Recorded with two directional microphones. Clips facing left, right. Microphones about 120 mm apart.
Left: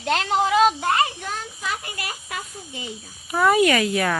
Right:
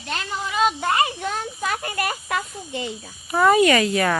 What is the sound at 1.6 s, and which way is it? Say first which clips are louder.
Snake: right 7 dB; 55° right (ahead or behind).